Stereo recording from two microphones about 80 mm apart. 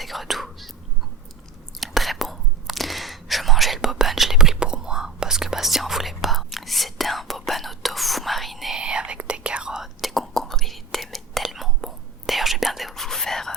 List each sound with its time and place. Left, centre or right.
0.0 s whispering: centre
1.8 s whispering: centre
8.8 s whispering: centre